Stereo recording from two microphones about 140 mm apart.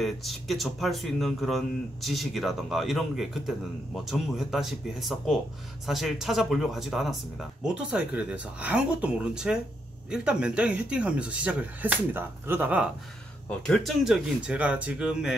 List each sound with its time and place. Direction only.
0.0 s speech: centre (ahead or behind)
13.5 s speech: 5° left (ahead or behind)